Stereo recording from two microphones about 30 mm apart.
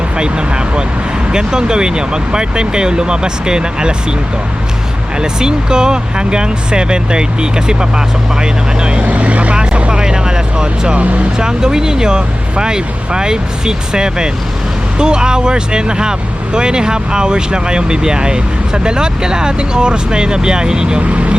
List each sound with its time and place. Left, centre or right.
0.2 s speech: right
5.2 s speech: right
9.0 s speech: right
9.9 s a sound: right
10.9 s speech: right
11.3 s speech: right
21.1 s speech: right